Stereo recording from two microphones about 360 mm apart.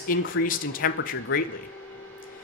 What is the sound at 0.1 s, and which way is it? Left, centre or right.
Speech, left.